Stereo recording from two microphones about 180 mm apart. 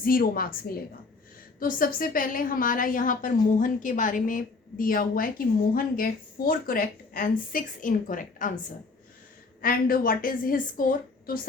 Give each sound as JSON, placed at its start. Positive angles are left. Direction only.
{"t": 0.0, "sound": "a woman's voice", "side_deg": 55}
{"t": 9.6, "sound": "a woman's voice", "side_deg": 55}